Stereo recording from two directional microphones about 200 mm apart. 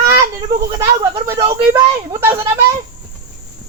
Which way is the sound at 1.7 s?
20° right (ahead or behind).